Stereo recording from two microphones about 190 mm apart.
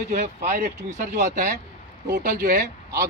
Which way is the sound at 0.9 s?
40° right (ahead or behind).